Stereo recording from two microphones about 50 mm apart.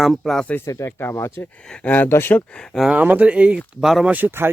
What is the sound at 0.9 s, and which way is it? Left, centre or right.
Speech, left.